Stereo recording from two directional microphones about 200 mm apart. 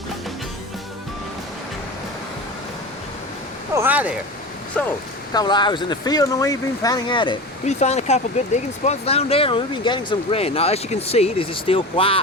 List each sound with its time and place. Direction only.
3.8 s speech: 10° right (ahead or behind)
4.8 s speech: 5° left (ahead or behind)
5.3 s speech: 20° left (ahead or behind)
7.7 s speech: 35° left (ahead or behind)